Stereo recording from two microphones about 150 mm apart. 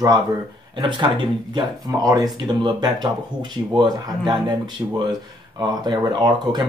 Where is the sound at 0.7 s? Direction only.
30° right (ahead or behind).